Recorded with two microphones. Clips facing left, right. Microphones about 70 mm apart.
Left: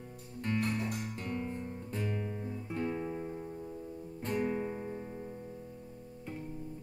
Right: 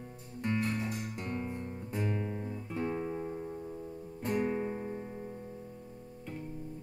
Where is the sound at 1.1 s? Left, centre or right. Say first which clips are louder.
Even; right.